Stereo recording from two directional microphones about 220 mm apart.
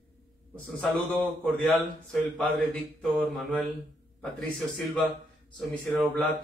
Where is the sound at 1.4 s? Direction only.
Centre (ahead or behind).